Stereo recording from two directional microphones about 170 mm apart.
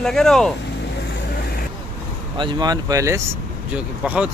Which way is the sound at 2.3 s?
25° right (ahead or behind).